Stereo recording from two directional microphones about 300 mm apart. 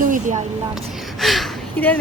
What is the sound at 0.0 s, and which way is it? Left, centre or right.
Speech, right.